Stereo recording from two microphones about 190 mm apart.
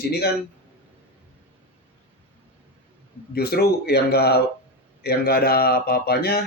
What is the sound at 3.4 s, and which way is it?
A man's voice, 55° left (ahead or behind).